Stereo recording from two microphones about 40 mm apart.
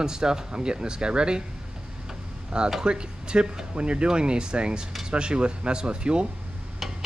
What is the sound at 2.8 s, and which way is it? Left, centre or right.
Speech, right.